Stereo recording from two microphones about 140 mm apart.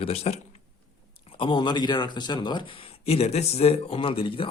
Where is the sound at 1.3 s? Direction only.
35° left (ahead or behind).